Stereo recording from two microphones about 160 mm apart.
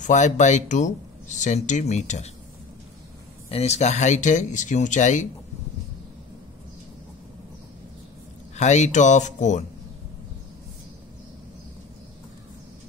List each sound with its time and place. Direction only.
0.0 s speech: 50° left (ahead or behind)
3.4 s speech: 40° left (ahead or behind)
8.5 s speech: 45° left (ahead or behind)